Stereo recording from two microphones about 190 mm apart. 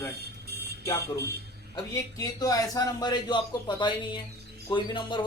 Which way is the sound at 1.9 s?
15° left (ahead or behind).